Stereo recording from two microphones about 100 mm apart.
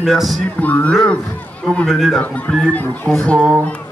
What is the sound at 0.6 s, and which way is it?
Speech, 15° left (ahead or behind).